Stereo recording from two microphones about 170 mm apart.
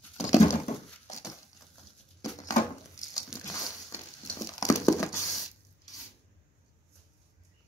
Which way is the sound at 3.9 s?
20° left (ahead or behind).